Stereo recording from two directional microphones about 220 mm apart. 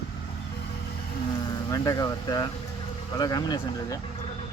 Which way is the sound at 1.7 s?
15° left (ahead or behind).